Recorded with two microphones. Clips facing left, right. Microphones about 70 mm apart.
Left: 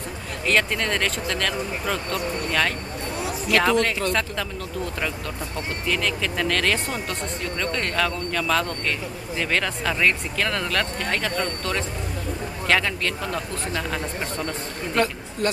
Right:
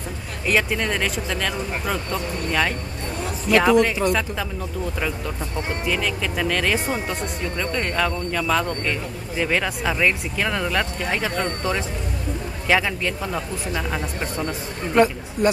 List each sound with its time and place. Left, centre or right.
0.5 s speech: centre
3.4 s speech: centre
5.9 s speech: centre